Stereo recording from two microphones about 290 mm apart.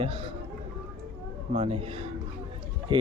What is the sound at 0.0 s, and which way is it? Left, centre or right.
Speech, centre.